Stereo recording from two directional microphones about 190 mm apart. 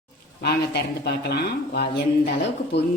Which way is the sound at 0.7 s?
60° left (ahead or behind).